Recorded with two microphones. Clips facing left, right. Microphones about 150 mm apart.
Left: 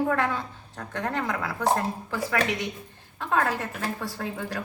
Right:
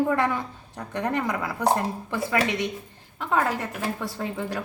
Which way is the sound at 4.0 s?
20° right (ahead or behind).